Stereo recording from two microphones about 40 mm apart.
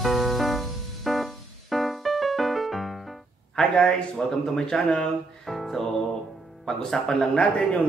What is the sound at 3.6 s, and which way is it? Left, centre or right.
A man's voice, centre.